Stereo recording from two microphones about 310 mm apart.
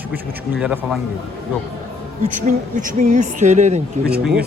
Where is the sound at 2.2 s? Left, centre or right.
Right.